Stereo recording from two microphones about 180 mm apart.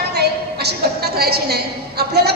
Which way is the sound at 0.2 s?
65° right (ahead or behind).